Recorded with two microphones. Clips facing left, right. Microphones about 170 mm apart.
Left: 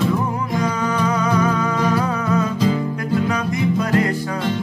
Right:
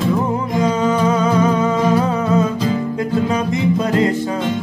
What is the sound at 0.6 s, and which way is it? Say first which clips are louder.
Music: right 6 dB; 25° right (ahead or behind).